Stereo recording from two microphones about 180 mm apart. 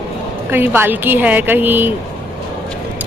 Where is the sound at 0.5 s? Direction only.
10° right (ahead or behind).